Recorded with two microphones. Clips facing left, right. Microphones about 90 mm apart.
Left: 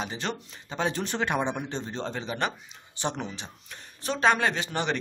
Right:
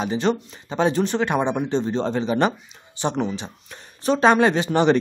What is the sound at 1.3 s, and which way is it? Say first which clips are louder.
A man's voice: right 7 dB; 20° right (ahead or behind).